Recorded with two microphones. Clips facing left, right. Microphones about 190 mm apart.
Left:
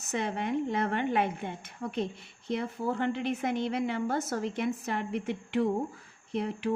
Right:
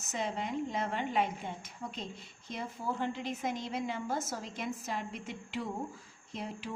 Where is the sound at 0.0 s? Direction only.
60° left (ahead or behind).